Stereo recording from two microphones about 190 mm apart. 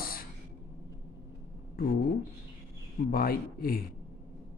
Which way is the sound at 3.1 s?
50° left (ahead or behind).